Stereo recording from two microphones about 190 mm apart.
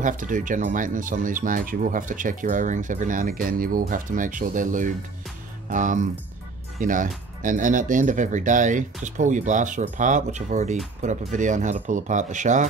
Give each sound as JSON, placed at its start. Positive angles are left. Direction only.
{"t": 0.0, "sound": "speech", "side_deg": -45}